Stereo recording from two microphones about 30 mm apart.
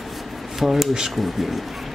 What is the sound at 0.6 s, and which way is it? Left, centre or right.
Speech, centre.